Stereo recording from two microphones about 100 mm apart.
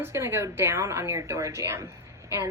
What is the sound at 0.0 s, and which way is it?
A woman's voice, 25° right (ahead or behind).